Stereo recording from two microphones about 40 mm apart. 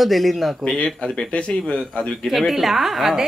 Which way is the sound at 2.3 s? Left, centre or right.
Centre.